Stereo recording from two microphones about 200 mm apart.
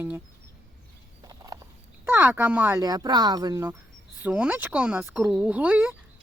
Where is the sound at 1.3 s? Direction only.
20° right (ahead or behind).